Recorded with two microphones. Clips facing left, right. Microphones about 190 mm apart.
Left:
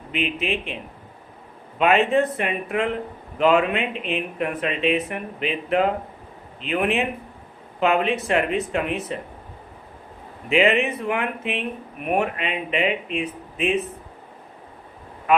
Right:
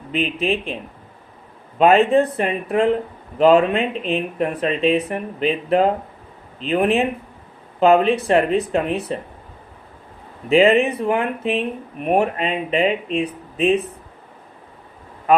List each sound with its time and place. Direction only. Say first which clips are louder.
0.1 s speech: right 4 dB; 35° right (ahead or behind)
1.8 s speech: right 5 dB; 35° right (ahead or behind)
10.5 s speech: right 5 dB; 35° right (ahead or behind)